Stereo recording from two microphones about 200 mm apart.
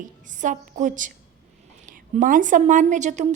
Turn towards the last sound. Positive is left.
turn(degrees=-35)  # may be behind; listen again after turning